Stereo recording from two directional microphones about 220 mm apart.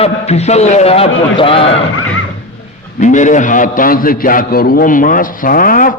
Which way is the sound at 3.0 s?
35° left (ahead or behind).